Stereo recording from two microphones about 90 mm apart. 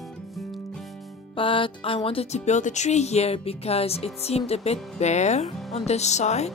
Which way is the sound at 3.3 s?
90° left.